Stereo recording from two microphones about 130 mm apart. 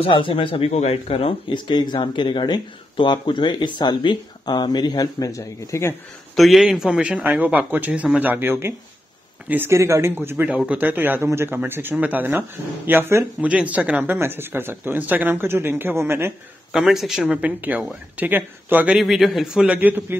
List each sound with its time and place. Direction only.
0.0 s speech: 40° left (ahead or behind); by 5.9 s 20° left (ahead or behind)
6.3 s speech: centre (ahead or behind); by 16.3 s 20° right (ahead or behind)
16.7 s speech: centre (ahead or behind)